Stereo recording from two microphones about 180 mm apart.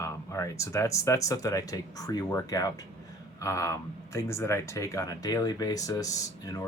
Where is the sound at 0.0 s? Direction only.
15° left (ahead or behind).